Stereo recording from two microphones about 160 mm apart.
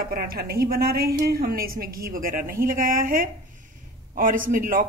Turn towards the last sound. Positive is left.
turn(degrees=-60)  # may be behind; listen again after turning